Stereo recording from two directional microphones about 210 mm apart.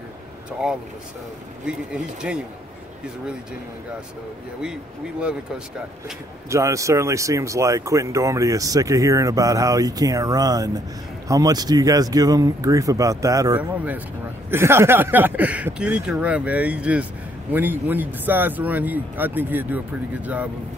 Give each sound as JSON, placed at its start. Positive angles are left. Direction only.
{"t": 1.7, "sound": "speech", "side_deg": -5}
{"t": 6.5, "sound": "speech", "side_deg": -15}